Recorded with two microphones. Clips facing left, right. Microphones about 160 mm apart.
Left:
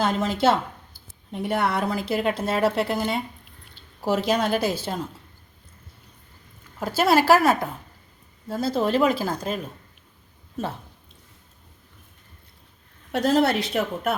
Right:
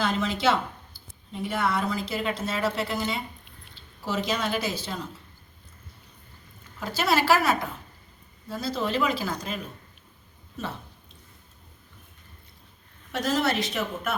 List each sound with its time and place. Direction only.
0.0 s speech: 45° left (ahead or behind)
0.9 s speech: 60° left (ahead or behind)
6.7 s speech: 45° left (ahead or behind)
13.1 s a woman's voice: 60° left (ahead or behind)